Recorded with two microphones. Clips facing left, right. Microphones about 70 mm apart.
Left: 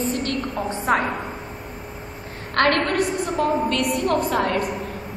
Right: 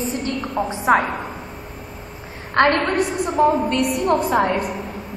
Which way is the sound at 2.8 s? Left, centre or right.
Centre.